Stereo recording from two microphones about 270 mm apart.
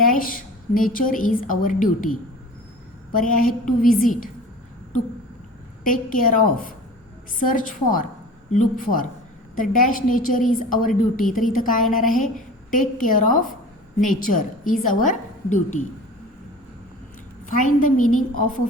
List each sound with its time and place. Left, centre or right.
0.0 s a woman's voice: left
3.2 s a woman's voice: left
5.8 s a woman's voice: left
17.6 s a woman's voice: left